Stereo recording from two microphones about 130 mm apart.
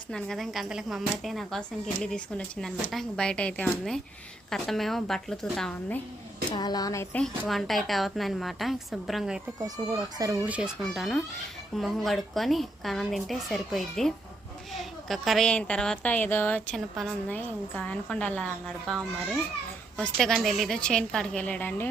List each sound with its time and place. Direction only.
0.1 s a woman's voice: 5° left (ahead or behind)
6.5 s speech: 30° left (ahead or behind)
7.1 s a woman's voice: 5° left (ahead or behind)
9.6 s speech: 30° right (ahead or behind)
10.4 s speech: 10° right (ahead or behind)
10.9 s a woman's voice: centre (ahead or behind)